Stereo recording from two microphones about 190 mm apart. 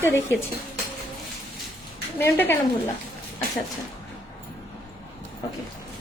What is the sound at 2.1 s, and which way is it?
Speech, 10° left (ahead or behind).